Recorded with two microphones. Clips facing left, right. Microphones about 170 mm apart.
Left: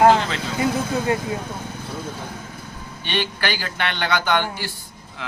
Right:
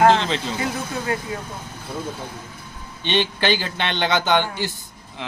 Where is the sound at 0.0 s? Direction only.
10° left (ahead or behind).